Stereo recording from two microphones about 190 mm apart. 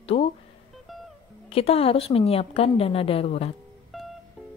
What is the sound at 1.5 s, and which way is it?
A woman's voice, 30° left (ahead or behind).